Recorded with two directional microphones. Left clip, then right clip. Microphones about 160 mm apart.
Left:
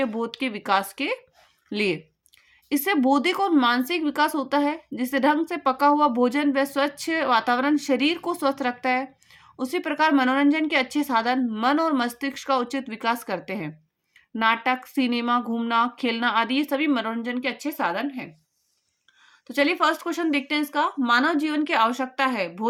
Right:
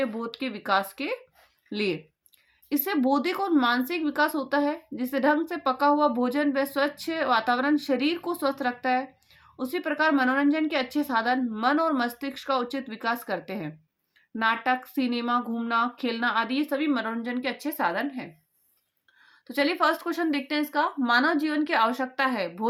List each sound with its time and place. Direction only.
0.0 s speech: 40° left (ahead or behind); by 18.3 s 20° left (ahead or behind)
19.5 s speech: 20° left (ahead or behind)